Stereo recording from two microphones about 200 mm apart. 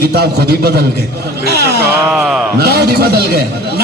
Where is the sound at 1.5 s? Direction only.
55° right (ahead or behind).